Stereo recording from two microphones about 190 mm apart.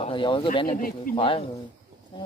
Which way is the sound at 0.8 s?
45° left (ahead or behind).